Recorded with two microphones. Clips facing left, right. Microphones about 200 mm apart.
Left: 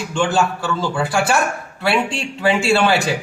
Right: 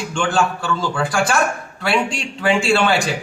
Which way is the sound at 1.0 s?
25° left (ahead or behind).